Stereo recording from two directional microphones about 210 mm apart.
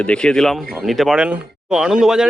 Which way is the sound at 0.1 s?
5° left (ahead or behind).